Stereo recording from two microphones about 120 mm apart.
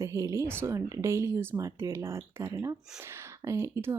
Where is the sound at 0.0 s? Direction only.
25° right (ahead or behind).